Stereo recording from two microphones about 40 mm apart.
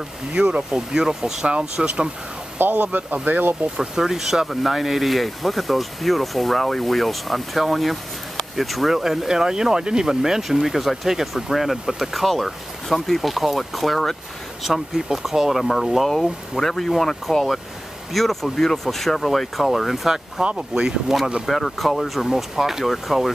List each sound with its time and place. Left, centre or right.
0.3 s speech: right
2.6 s speech: right
3.7 s speech: centre
20.4 s speech: right
21.5 s speech: centre